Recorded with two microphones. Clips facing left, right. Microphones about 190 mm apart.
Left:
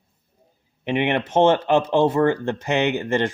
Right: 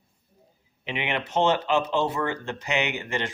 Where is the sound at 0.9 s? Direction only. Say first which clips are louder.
Left 8 dB; 50° left (ahead or behind).